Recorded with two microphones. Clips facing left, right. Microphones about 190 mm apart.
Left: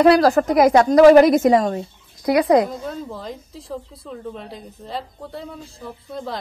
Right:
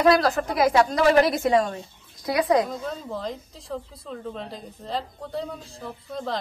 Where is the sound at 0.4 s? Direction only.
50° left (ahead or behind).